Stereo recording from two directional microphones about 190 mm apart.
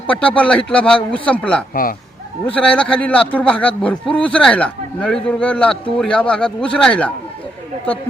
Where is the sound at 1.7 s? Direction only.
50° left (ahead or behind).